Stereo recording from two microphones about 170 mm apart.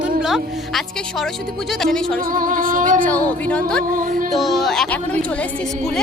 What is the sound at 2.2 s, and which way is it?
Music, 55° right (ahead or behind).